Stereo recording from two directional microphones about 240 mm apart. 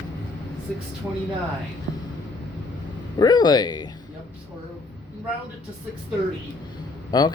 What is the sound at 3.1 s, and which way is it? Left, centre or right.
Speech, centre.